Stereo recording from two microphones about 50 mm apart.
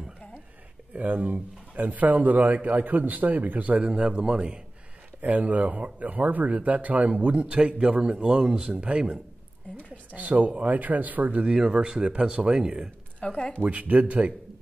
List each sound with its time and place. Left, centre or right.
0.9 s speech: right
3.8 s speech: right
5.2 s speech: right
10.1 s speech: right
11.4 s speech: centre
13.2 s speech: left
13.6 s speech: right